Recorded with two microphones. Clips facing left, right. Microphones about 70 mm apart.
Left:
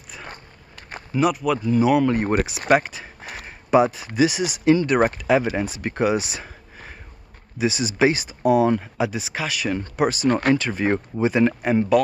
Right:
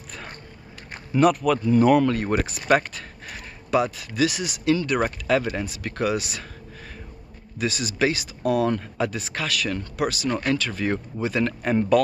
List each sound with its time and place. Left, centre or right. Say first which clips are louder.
1.1 s speech: right 2 dB; centre
2.0 s speech: left 3 dB; left
2.7 s speech: left 2 dB; centre
7.5 s speech: left 4 dB; centre
11.9 s speech: left 1 dB; centre